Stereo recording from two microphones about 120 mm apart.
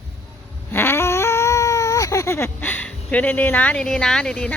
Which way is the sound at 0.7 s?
20° left (ahead or behind).